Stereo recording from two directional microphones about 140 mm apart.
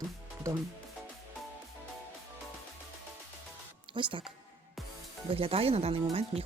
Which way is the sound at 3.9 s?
35° right (ahead or behind).